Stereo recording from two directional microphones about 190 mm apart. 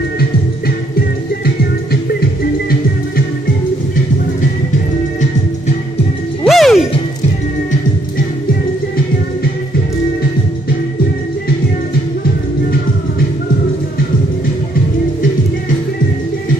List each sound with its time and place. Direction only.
1.4 s music: 55° left (ahead or behind)
6.4 s music: centre (ahead or behind)